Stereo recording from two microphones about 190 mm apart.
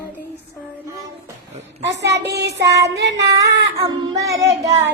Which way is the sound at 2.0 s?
65° right (ahead or behind).